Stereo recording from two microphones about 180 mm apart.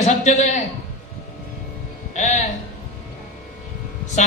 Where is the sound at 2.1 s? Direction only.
40° left (ahead or behind).